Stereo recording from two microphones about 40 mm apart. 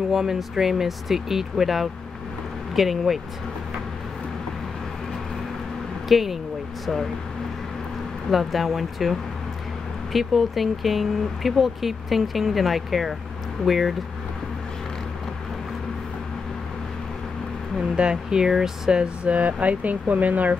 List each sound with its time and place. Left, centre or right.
0.1 s speech: centre
6.0 s speech: centre
8.3 s speech: centre
17.7 s speech: right
18.9 s speech: right